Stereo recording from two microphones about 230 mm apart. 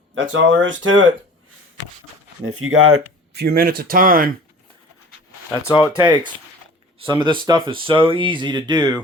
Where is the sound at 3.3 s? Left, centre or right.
Right.